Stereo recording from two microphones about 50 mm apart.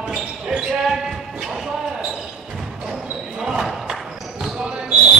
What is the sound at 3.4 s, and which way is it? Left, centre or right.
Basketball bounce, centre.